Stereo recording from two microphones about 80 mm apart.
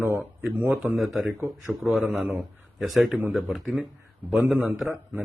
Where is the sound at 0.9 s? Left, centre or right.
Centre.